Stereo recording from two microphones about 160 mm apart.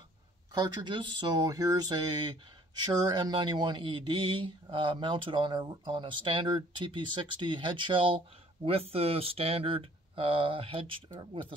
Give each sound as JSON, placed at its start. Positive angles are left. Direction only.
{"t": 0.6, "sound": "speech", "side_deg": -30}